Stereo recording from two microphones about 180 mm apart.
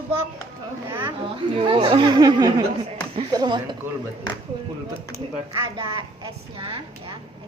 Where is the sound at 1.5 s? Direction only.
25° right (ahead or behind).